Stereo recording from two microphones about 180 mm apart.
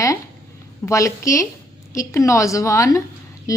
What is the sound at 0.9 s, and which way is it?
A woman's voice, 15° left (ahead or behind).